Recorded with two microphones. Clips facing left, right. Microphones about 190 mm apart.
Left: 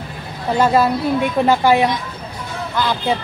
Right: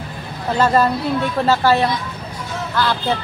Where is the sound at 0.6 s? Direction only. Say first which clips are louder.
Left 1 dB; 10° left (ahead or behind).